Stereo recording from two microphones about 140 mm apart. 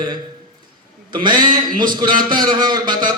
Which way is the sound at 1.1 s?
30° right (ahead or behind).